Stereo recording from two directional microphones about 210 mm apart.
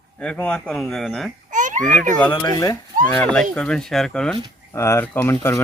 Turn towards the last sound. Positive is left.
turn(degrees=10)  # may be behind; listen again after turning